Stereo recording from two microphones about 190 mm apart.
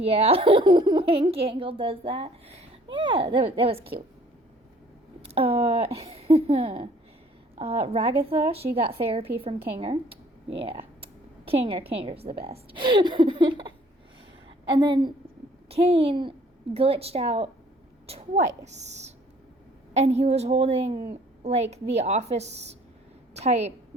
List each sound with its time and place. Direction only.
0.0 s a child's voice: 30° right (ahead or behind)
5.3 s a woman's voice: 30° right (ahead or behind)
14.8 s a child's voice: 25° right (ahead or behind)